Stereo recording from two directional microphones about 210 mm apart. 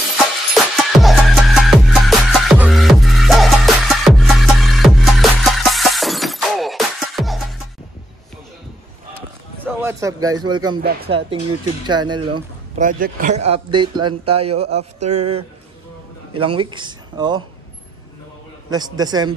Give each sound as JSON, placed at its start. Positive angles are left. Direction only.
{"t": 0.6, "sound": "music", "side_deg": 0}
{"t": 9.7, "sound": "speech", "side_deg": -10}
{"t": 10.8, "sound": "speech", "side_deg": -45}
{"t": 11.1, "sound": "speech", "side_deg": -25}
{"t": 12.3, "sound": "speech", "side_deg": -40}
{"t": 13.5, "sound": "speech", "side_deg": -20}
{"t": 16.3, "sound": "speech", "side_deg": -25}
{"t": 18.7, "sound": "speech", "side_deg": -20}